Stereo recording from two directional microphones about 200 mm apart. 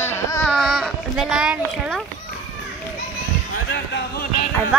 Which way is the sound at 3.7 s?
60° left (ahead or behind).